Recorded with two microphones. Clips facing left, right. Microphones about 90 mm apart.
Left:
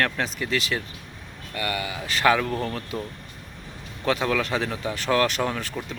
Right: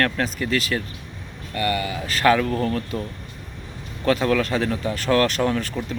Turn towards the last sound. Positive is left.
turn(degrees=15)  # may be behind; listen again after turning